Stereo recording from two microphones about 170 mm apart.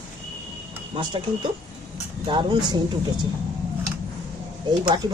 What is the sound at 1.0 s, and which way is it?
Speech, 30° right (ahead or behind).